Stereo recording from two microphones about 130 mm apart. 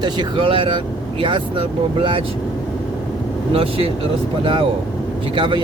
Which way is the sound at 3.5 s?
50° right (ahead or behind).